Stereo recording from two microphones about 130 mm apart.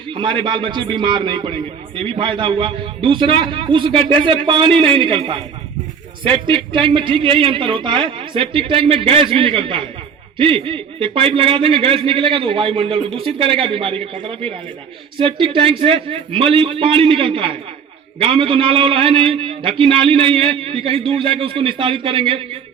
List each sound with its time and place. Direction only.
0.1 s a man's voice: 40° right (ahead or behind)